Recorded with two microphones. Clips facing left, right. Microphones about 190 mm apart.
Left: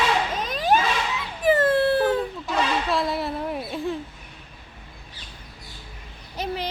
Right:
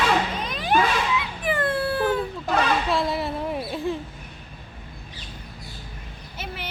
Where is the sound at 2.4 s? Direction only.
55° right (ahead or behind).